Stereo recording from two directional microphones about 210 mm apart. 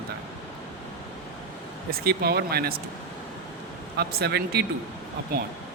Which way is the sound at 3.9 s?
50° right (ahead or behind).